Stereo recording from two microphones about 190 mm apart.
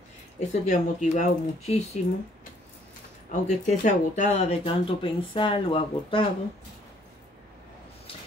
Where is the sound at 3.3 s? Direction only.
40° left (ahead or behind).